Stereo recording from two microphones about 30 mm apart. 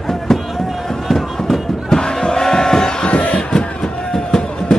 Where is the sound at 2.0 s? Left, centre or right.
Left.